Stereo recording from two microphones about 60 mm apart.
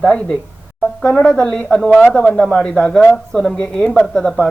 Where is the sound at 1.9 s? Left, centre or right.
Right.